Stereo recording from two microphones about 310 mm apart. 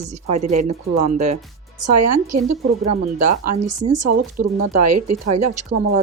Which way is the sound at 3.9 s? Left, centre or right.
Right.